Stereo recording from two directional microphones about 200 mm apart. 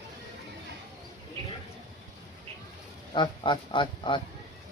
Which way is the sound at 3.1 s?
25° left (ahead or behind).